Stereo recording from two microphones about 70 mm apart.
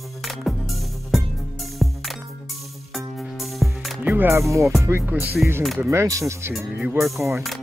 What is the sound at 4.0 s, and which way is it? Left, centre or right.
Music, right.